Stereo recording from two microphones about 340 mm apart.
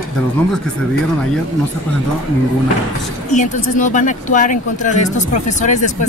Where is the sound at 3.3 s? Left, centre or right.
Left.